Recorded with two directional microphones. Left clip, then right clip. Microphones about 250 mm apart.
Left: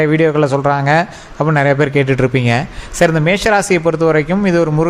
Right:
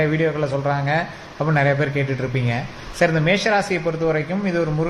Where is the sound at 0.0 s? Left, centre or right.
Left.